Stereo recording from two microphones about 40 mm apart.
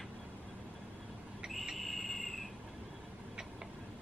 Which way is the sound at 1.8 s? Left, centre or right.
Centre.